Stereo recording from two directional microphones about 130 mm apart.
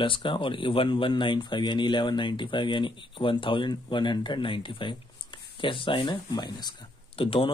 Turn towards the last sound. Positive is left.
turn(degrees=45)  # may be behind; listen again after turning